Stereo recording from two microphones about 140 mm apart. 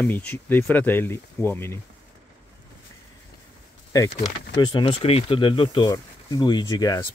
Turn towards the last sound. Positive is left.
turn(degrees=25)  # may be behind; listen again after turning